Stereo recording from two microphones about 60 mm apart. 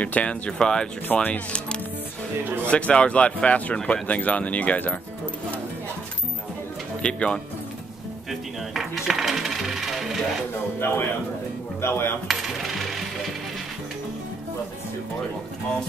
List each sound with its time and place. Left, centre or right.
0.0 s speech: left
2.7 s speech: centre
7.0 s speech: centre
8.3 s coin: centre
10.8 s speech: left
12.3 s coin: centre